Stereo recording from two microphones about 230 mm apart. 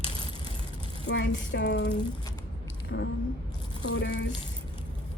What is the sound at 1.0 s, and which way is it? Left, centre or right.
Speech, left.